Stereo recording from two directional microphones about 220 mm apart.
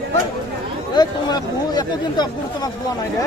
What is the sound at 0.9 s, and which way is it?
Speech, 20° left (ahead or behind).